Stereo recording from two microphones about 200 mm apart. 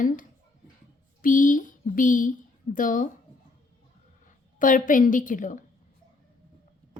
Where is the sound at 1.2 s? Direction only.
40° left (ahead or behind).